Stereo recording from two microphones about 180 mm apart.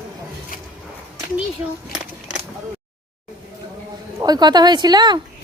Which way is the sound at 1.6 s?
15° right (ahead or behind).